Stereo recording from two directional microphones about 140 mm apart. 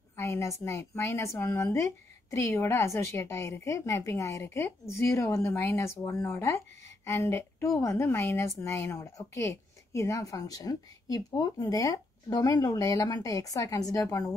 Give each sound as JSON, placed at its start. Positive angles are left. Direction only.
{"t": 0.1, "sound": "a woman's voice", "side_deg": 20}